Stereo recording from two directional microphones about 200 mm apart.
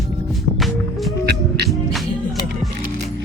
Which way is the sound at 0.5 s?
Centre (ahead or behind).